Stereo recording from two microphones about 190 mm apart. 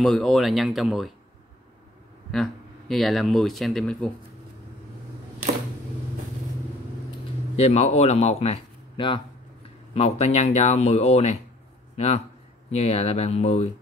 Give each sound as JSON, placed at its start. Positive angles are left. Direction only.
{"t": 0.0, "sound": "speech", "side_deg": 0}
{"t": 2.3, "sound": "speech", "side_deg": 0}
{"t": 7.5, "sound": "speech", "side_deg": 35}
{"t": 12.7, "sound": "speech", "side_deg": 35}